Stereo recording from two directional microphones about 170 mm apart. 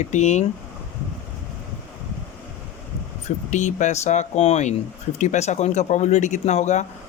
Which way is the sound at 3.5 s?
45° left (ahead or behind).